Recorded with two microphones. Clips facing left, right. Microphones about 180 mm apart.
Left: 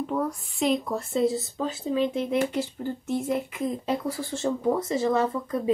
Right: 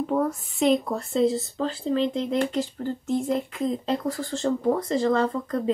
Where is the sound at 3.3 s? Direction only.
10° left (ahead or behind).